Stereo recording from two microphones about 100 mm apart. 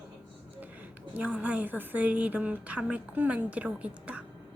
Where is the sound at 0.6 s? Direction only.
15° right (ahead or behind).